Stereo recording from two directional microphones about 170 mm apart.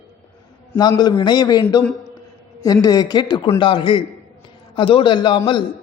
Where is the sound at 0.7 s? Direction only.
25° left (ahead or behind).